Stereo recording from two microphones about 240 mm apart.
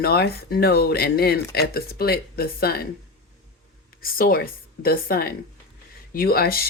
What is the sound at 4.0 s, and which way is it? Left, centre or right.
Speech, left.